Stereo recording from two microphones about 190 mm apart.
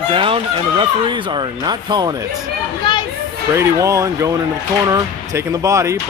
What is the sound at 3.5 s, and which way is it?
Speech, 15° right (ahead or behind).